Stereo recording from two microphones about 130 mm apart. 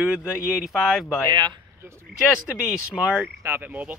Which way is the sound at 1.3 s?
35° right (ahead or behind).